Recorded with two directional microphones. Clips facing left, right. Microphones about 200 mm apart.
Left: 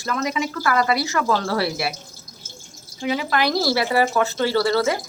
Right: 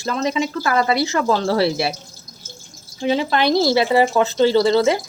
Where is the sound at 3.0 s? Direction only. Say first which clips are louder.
Right 4 dB; 25° right (ahead or behind).